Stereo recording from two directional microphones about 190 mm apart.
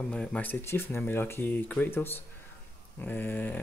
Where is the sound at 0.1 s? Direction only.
5° left (ahead or behind).